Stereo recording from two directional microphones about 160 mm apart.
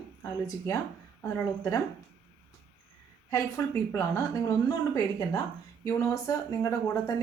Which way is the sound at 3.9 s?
20° left (ahead or behind).